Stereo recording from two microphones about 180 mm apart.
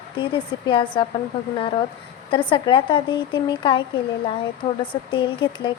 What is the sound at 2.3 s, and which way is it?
A woman's voice, 25° left (ahead or behind).